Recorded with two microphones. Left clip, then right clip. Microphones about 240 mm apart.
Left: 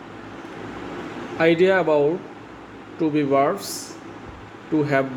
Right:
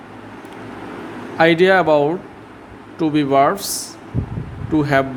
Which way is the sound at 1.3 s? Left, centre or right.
Right.